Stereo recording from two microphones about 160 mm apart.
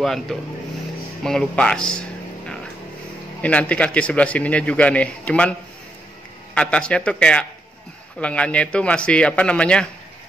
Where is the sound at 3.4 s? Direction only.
10° left (ahead or behind).